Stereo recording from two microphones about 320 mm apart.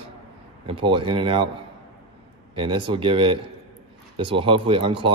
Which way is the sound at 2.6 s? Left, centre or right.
Centre.